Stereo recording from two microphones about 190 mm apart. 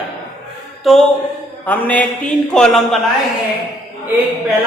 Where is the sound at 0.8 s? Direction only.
Centre (ahead or behind).